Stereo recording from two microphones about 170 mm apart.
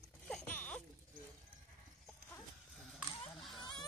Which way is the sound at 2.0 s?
5° left (ahead or behind).